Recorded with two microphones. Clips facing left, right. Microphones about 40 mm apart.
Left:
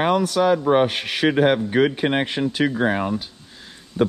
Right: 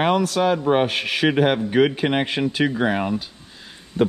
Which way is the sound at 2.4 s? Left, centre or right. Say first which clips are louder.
Even; right.